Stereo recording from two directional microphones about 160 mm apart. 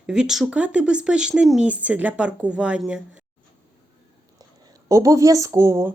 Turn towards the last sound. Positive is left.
turn(degrees=-20)  # may be behind; listen again after turning